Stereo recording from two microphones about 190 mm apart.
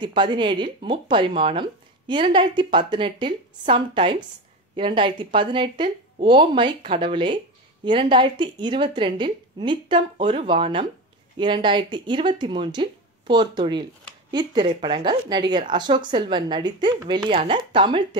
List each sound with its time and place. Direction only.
0.0 s speech: 25° right (ahead or behind)